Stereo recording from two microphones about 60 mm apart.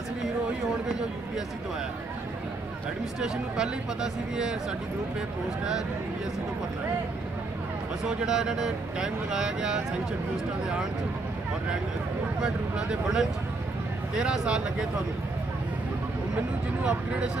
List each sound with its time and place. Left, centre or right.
3.2 s speech: centre
8.0 s speech: centre
12.4 s speech: centre
16.8 s speech: centre